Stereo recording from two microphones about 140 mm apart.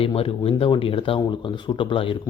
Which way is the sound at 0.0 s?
40° left (ahead or behind).